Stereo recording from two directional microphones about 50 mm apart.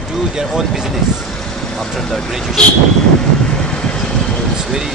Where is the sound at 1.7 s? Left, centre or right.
Centre.